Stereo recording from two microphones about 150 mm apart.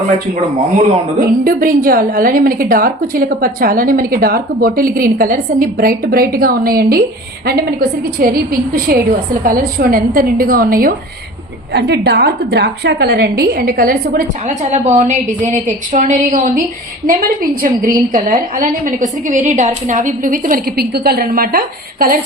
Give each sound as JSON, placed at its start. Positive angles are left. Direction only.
{"t": 1.5, "sound": "a woman's voice", "side_deg": -70}
{"t": 11.7, "sound": "a woman's voice", "side_deg": -90}
{"t": 14.4, "sound": "a woman's voice", "side_deg": -50}
{"t": 17.1, "sound": "a woman's voice", "side_deg": -75}